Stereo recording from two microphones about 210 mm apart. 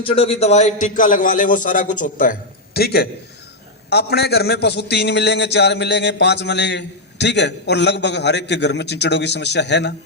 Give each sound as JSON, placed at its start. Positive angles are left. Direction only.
{"t": 0.0, "sound": "a man's voice", "side_deg": 25}